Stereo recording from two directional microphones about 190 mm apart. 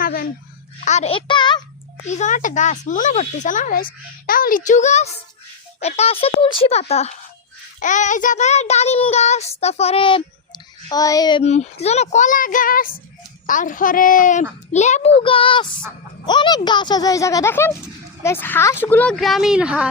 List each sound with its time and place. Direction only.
0.0 s a sound: 50° left (ahead or behind)
0.9 s a child's voice: 35° left (ahead or behind)
2.0 s child singing: 40° left (ahead or behind); by 11.4 s 20° left (ahead or behind)
11.4 s speech: 35° left (ahead or behind)
14.7 s child singing: 35° left (ahead or behind)
15.2 s speech: 30° left (ahead or behind); by 19.9 s 5° right (ahead or behind)